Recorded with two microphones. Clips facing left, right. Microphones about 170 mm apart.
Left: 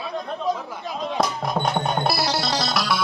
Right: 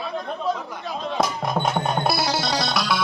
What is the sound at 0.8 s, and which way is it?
Music, 10° left (ahead or behind).